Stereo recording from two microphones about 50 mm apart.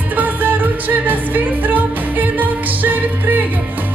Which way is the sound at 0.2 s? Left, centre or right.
Right.